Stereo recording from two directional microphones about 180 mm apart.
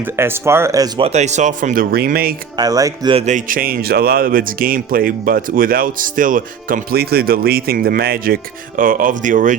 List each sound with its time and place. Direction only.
0.0 s speech: 15° right (ahead or behind)
1.0 s speech: 40° right (ahead or behind); by 2.3 s 55° right (ahead or behind)
2.6 s speech: 20° right (ahead or behind)
3.2 s speech: 45° right (ahead or behind)